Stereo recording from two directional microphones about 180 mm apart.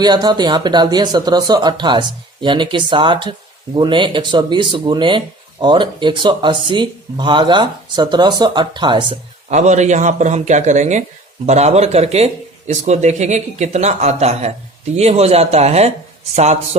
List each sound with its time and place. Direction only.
0.0 s speech: 25° right (ahead or behind)
9.5 s speech: 40° right (ahead or behind)